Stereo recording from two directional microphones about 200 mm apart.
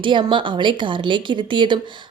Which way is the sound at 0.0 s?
25° right (ahead or behind).